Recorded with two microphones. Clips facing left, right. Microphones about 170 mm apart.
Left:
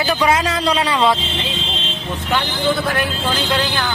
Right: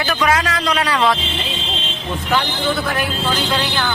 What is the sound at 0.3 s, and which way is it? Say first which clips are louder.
Speech: left 1 dB; 25° left (ahead or behind).